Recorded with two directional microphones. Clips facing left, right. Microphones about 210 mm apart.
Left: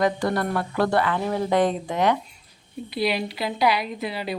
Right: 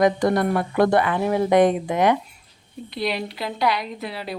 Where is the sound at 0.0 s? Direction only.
15° right (ahead or behind).